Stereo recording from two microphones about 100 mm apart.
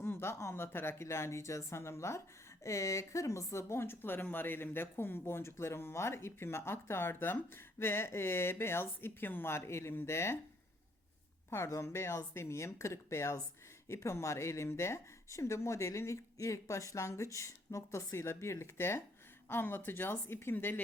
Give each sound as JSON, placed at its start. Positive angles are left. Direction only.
{"t": 0.0, "sound": "a woman's voice", "side_deg": 25}
{"t": 11.5, "sound": "a woman's voice", "side_deg": 30}